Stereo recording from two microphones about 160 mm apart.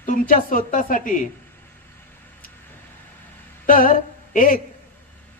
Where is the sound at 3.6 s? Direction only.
60° left (ahead or behind).